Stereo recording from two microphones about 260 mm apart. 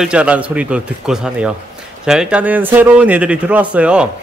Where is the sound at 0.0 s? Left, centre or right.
Centre.